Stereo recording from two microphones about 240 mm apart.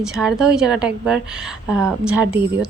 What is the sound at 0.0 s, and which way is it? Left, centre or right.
Speech, centre.